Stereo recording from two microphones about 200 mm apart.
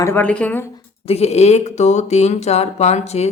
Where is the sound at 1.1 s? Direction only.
30° left (ahead or behind).